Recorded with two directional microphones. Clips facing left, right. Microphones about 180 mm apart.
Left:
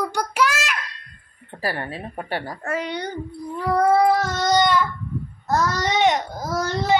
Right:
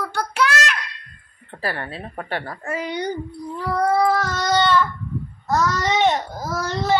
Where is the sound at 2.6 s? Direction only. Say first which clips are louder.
Right 1 dB; 5° right (ahead or behind).